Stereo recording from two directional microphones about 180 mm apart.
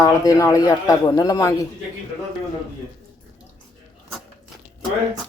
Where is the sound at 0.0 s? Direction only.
20° left (ahead or behind).